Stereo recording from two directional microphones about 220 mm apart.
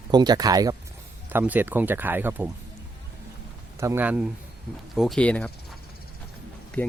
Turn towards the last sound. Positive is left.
turn(degrees=5)  # may be behind; listen again after turning